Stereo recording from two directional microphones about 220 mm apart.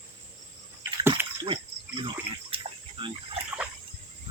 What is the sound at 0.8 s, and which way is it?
Water, 10° right (ahead or behind).